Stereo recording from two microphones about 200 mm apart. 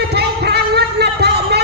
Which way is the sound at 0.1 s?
55° right (ahead or behind).